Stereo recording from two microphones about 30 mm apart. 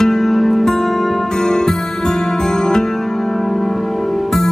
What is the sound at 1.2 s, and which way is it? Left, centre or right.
Music, left.